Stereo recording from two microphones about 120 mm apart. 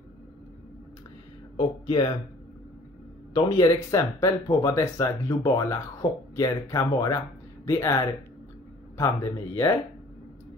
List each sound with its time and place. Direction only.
1.6 s speech: 40° left (ahead or behind)
3.3 s speech: 30° left (ahead or behind)